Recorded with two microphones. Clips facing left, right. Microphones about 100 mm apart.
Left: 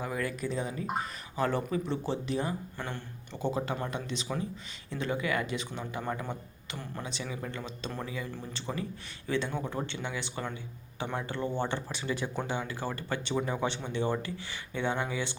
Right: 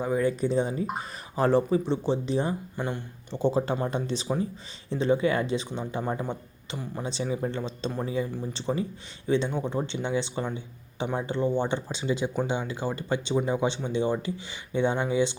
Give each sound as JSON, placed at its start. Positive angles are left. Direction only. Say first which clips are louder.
{"t": 0.0, "sound": "speech", "louder": "right 8 dB", "side_deg": -25}
{"t": 3.3, "sound": "speech", "louder": "right 7 dB", "side_deg": -30}